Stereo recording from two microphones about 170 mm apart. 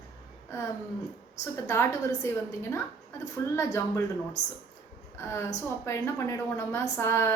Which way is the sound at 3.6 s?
15° left (ahead or behind).